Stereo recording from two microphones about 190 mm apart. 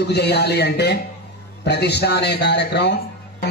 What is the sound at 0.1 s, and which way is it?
A man's voice, 60° left (ahead or behind).